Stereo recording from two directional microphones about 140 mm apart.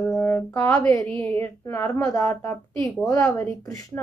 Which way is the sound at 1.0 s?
10° left (ahead or behind).